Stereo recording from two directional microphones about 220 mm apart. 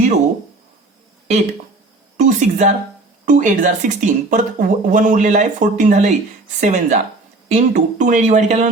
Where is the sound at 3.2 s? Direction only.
35° right (ahead or behind).